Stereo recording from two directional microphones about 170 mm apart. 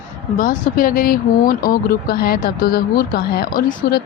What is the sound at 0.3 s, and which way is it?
Speech, 55° left (ahead or behind).